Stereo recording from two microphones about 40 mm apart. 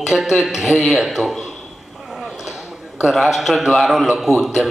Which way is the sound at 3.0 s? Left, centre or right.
Centre.